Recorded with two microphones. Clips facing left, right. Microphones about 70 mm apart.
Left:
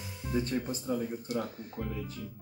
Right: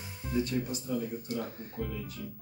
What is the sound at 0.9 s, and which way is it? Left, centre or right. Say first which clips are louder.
Speech: left 2 dB; left.